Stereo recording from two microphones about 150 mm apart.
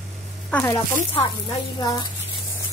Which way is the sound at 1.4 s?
30° left (ahead or behind).